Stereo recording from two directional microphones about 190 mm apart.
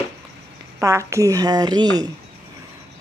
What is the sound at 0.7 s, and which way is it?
Speech, 15° right (ahead or behind).